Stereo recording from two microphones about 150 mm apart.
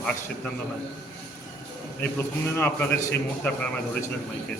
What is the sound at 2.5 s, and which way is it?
A man's voice, 15° left (ahead or behind).